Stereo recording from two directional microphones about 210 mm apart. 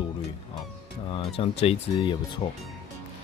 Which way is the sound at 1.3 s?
25° left (ahead or behind).